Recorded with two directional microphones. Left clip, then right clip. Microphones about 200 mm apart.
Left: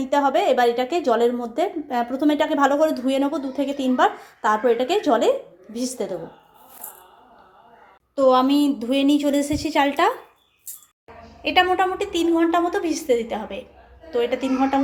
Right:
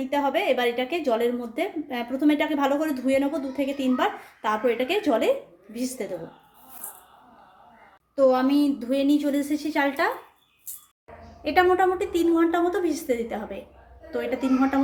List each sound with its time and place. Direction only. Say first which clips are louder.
0.0 s a woman's voice: left 5 dB; 20° left (ahead or behind)
8.1 s a woman's voice: left 3 dB; 25° left (ahead or behind)
11.4 s a woman's voice: left 2 dB; centre (ahead or behind)